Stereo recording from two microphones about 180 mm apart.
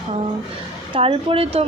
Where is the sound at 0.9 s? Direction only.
30° right (ahead or behind).